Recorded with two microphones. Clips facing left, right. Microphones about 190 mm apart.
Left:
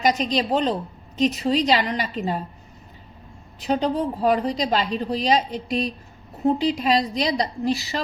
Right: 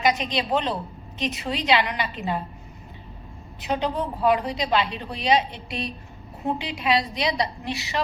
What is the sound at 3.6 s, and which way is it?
A woman's voice, 35° left (ahead or behind).